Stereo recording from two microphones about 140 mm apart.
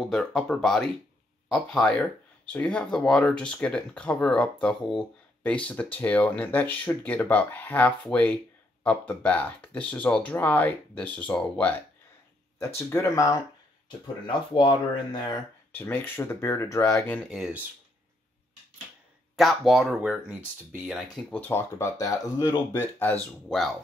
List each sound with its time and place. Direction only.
0.0 s speech: 5° left (ahead or behind); by 13.4 s 25° left (ahead or behind)
13.8 s speech: 35° left (ahead or behind)
15.7 s speech: 15° left (ahead or behind)
17.1 s speech: 5° left (ahead or behind)
19.3 s speech: centre (ahead or behind)
21.3 s speech: 15° left (ahead or behind)
22.8 s speech: 15° left (ahead or behind)
23.5 s speech: centre (ahead or behind)